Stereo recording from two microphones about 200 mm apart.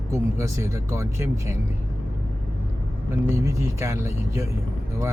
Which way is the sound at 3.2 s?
15° right (ahead or behind).